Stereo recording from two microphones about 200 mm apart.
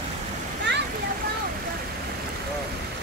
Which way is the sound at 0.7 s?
60° right (ahead or behind).